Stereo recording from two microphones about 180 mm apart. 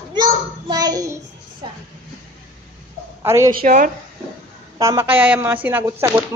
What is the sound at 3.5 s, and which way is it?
Speech, 50° right (ahead or behind).